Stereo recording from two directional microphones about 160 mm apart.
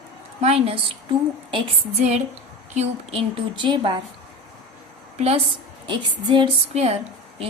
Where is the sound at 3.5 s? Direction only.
30° right (ahead or behind).